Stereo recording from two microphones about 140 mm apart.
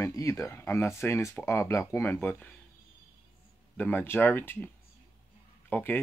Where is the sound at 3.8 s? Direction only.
15° left (ahead or behind).